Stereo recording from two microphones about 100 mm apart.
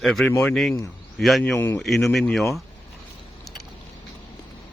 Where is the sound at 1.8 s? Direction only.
Centre (ahead or behind).